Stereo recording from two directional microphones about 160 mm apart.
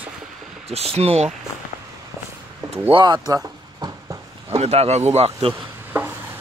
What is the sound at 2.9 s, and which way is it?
Speech, 30° right (ahead or behind).